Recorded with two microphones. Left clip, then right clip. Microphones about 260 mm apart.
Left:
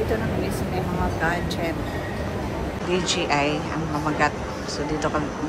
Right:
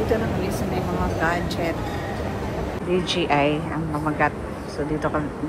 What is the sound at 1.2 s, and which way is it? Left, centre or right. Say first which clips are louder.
Speech: right 2 dB; centre.